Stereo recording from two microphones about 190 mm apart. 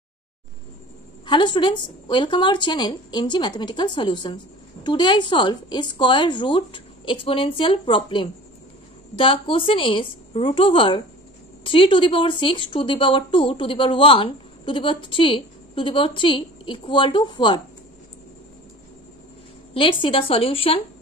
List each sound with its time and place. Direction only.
1.2 s speech: 25° left (ahead or behind)
19.7 s speech: 25° left (ahead or behind)